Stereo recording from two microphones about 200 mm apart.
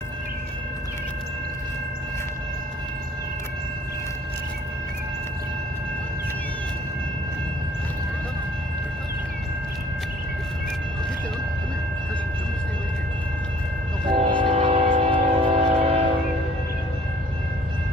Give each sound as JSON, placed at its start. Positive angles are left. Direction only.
{"t": 14.0, "sound": "train", "side_deg": -25}